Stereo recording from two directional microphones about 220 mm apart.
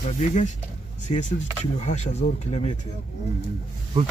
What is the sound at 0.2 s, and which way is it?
Speech, 35° left (ahead or behind).